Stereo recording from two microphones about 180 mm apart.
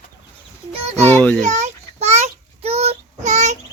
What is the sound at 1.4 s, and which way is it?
Child singing, 40° right (ahead or behind).